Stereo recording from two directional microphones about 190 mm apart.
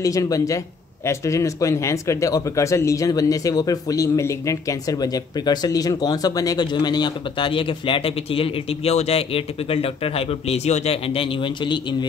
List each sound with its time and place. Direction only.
0.0 s speech: 15° left (ahead or behind)